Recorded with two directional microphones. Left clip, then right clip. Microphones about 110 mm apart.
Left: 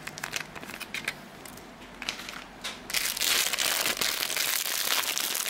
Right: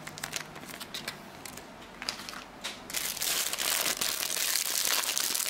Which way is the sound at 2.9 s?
5° left (ahead or behind).